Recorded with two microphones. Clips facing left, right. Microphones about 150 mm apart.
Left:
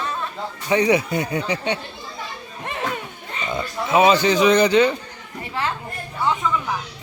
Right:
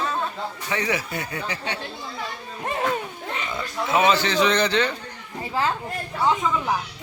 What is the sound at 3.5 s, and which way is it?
Speech, 20° left (ahead or behind).